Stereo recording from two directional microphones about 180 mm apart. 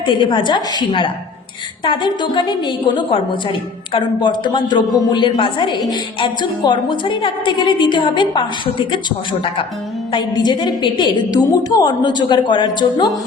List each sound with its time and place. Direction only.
0.0 s a woman's voice: 25° left (ahead or behind)